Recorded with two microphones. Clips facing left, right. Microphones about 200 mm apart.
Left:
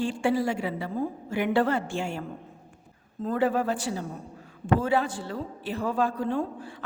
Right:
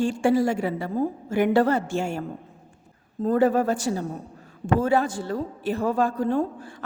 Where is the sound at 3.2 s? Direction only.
45° right (ahead or behind).